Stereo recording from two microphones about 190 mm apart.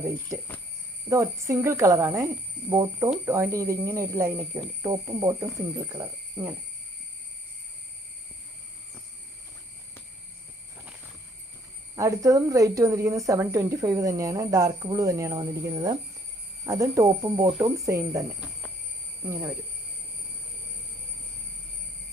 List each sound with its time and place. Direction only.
1.1 s speech: 15° right (ahead or behind)
11.9 s speech: 15° right (ahead or behind)